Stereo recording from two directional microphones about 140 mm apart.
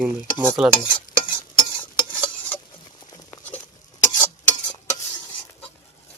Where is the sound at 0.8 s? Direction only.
35° left (ahead or behind).